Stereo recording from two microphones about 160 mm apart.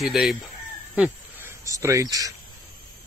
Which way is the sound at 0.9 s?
10° right (ahead or behind).